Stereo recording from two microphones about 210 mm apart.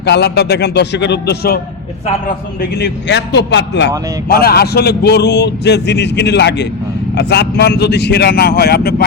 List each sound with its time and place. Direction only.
0.0 s a man's voice: 50° left (ahead or behind)
2.6 s a man's voice: 50° left (ahead or behind)